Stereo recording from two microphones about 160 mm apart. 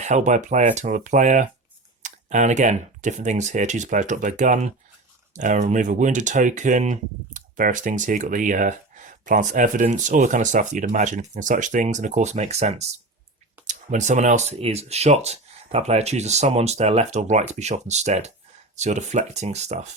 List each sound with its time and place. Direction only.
0.0 s speech: 50° right (ahead or behind)